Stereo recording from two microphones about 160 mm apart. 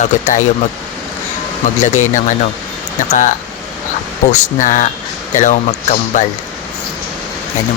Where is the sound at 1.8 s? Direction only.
50° left (ahead or behind).